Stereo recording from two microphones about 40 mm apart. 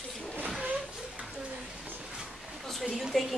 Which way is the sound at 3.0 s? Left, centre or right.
Centre.